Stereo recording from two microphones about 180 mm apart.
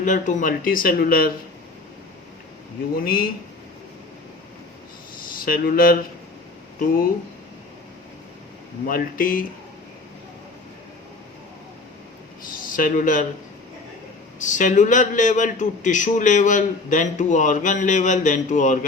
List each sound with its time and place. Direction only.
0.0 s a man's voice: 45° left (ahead or behind)
3.0 s a man's voice: 55° left (ahead or behind)
5.5 s a man's voice: 55° left (ahead or behind)
8.9 s a man's voice: 50° left (ahead or behind)
12.5 s a sound: 50° left (ahead or behind)
14.3 s a man's voice: 45° left (ahead or behind)